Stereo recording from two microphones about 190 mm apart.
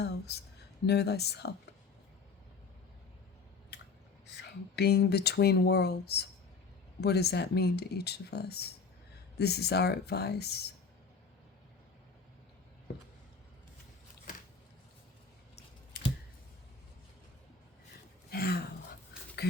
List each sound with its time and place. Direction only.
0.9 s speech: 60° left (ahead or behind)
4.4 s speech: 60° left (ahead or behind)
18.3 s a sound: 55° left (ahead or behind)
19.4 s speech: 60° left (ahead or behind)